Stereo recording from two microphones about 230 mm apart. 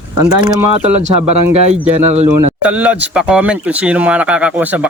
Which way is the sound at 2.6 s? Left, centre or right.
Centre.